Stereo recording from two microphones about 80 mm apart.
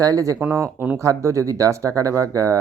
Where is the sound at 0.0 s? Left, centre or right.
Right.